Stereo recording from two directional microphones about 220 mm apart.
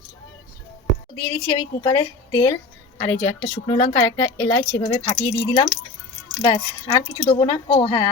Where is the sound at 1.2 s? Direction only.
25° left (ahead or behind).